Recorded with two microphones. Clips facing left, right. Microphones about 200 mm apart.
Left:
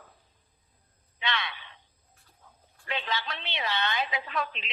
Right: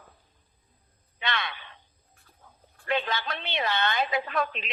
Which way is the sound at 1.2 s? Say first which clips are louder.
Right 1 dB; 50° right (ahead or behind).